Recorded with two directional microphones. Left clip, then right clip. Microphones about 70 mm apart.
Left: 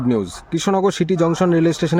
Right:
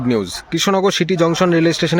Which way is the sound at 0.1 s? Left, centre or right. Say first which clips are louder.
Right 3 dB; centre.